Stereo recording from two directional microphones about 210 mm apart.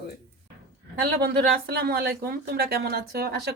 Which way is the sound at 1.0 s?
45° right (ahead or behind).